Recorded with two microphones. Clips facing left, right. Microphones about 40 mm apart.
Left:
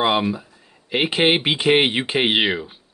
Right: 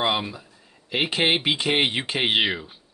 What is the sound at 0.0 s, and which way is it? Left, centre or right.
Speech, centre.